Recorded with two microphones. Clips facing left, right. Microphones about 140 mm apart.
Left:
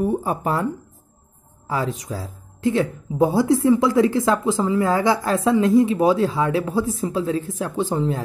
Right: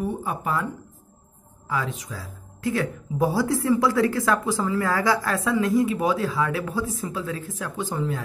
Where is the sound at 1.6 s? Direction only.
35° left (ahead or behind).